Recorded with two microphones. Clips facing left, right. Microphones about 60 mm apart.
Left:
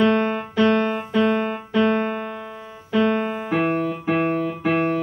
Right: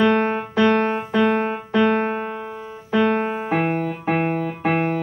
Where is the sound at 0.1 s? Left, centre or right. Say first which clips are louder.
Right 1 dB; right.